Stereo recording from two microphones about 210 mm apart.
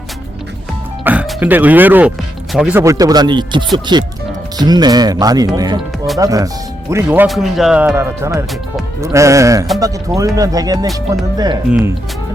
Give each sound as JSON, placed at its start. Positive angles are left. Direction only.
{"t": 1.0, "sound": "speech", "side_deg": -5}
{"t": 11.7, "sound": "speech", "side_deg": -5}